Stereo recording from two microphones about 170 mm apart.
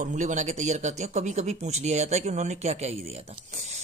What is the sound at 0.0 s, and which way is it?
Speech, 45° right (ahead or behind).